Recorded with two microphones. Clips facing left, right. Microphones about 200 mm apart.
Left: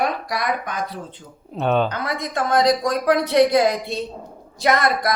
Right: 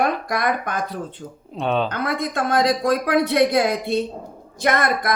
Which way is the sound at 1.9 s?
55° right (ahead or behind).